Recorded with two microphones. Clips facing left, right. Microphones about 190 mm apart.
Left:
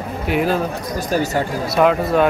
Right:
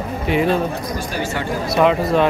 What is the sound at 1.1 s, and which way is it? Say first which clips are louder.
Speech: left 8 dB; 40° left (ahead or behind).